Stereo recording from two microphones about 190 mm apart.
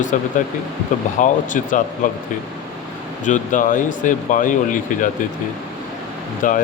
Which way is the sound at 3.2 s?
40° left (ahead or behind).